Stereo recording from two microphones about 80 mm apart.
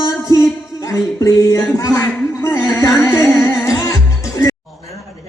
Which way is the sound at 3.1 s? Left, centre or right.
Left.